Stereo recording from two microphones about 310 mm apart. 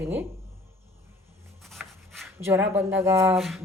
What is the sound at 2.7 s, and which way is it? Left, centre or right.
Speech, centre.